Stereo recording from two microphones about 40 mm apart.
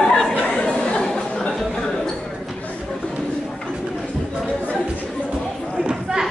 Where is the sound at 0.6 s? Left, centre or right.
Left.